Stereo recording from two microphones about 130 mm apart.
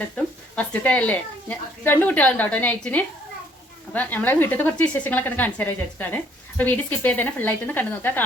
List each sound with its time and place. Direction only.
0.5 s speech: 10° left (ahead or behind)